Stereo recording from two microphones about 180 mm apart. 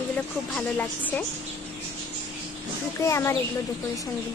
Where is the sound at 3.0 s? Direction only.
15° left (ahead or behind).